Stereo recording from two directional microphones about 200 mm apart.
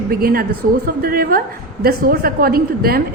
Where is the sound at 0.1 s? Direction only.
50° right (ahead or behind).